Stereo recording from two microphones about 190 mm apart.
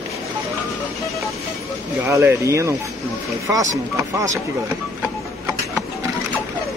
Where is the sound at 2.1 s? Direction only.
15° right (ahead or behind).